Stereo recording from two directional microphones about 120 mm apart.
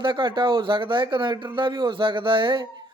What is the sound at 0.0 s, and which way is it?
Speech, 40° right (ahead or behind).